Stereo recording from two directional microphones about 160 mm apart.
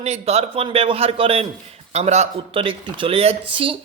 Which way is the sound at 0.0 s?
40° right (ahead or behind).